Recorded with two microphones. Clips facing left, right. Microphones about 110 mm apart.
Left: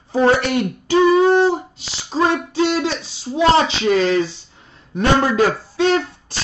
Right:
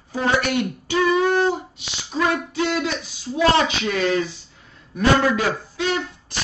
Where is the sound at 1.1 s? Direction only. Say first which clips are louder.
Left 3 dB; 30° left (ahead or behind).